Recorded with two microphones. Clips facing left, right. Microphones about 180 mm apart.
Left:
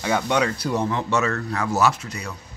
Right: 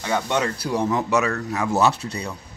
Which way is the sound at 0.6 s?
10° right (ahead or behind).